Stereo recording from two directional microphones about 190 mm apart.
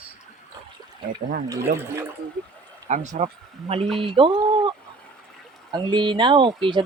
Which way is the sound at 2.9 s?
40° right (ahead or behind).